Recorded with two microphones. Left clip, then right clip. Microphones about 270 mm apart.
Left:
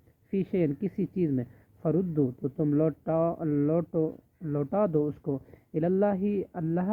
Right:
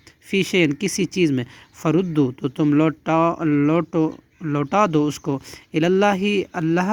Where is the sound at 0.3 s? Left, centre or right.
Right.